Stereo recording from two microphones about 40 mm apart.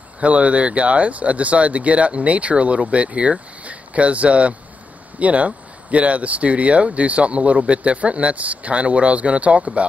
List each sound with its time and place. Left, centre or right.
0.2 s speech: right